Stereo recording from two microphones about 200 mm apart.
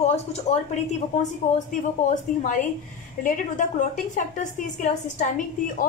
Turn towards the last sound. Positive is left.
turn(degrees=40)  # may be behind; listen again after turning